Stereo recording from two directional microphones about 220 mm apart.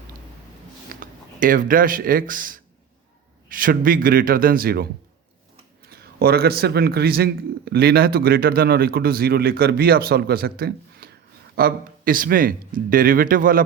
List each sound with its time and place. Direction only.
0.9 s a man's voice: 40° right (ahead or behind)